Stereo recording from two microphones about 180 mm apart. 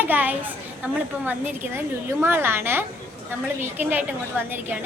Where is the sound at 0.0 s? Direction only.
10° right (ahead or behind).